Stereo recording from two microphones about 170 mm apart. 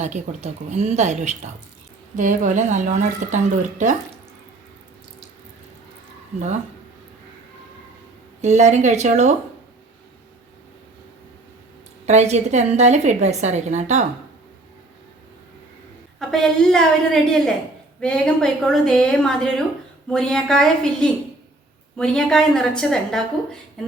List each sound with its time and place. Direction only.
0.0 s a woman's voice: 45° right (ahead or behind)
8.4 s a woman's voice: 45° right (ahead or behind)
12.0 s a woman's voice: 40° right (ahead or behind)
16.1 s a woman's voice: centre (ahead or behind)